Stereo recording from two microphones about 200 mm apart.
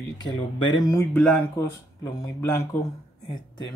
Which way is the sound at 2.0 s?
20° left (ahead or behind).